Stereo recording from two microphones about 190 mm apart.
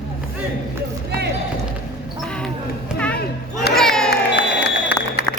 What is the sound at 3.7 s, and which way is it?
Crowd, centre (ahead or behind).